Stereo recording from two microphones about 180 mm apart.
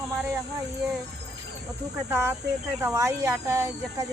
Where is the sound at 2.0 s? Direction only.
15° right (ahead or behind).